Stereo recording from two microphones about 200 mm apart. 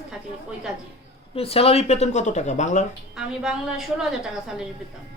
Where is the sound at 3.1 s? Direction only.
5° right (ahead or behind).